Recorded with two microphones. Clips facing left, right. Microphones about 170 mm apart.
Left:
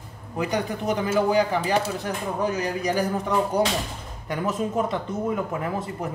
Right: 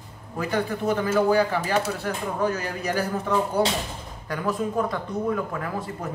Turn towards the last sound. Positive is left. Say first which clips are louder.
# left 2 dB
turn(degrees=20)  # may be behind; listen again after turning